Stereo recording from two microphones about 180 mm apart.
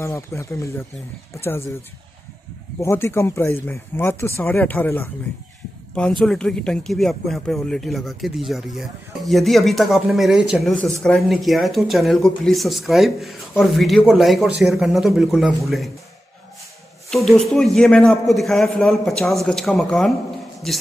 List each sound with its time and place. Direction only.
0.0 s speech: 15° left (ahead or behind)
2.8 s speech: 15° left (ahead or behind)
17.1 s speech: centre (ahead or behind)